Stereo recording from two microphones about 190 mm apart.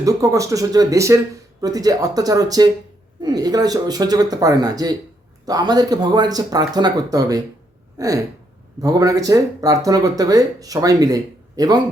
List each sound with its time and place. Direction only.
0.0 s speech: 15° right (ahead or behind)